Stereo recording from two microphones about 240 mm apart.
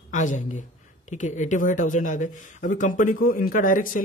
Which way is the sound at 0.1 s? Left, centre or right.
Left.